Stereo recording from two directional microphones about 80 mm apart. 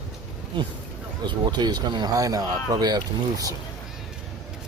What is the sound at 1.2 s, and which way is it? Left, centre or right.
Speech, right.